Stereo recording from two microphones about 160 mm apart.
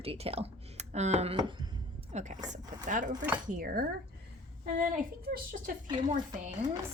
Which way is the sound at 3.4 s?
60° right (ahead or behind).